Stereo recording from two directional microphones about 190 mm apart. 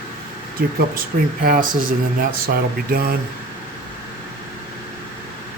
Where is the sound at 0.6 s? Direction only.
55° right (ahead or behind).